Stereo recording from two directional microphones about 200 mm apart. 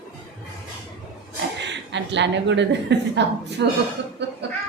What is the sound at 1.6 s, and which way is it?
A woman's voice, 60° right (ahead or behind).